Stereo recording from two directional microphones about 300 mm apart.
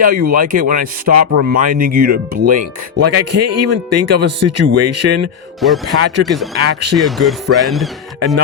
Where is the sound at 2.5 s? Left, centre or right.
Right.